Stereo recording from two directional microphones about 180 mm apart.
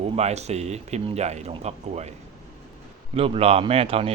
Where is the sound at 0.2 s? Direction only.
35° right (ahead or behind).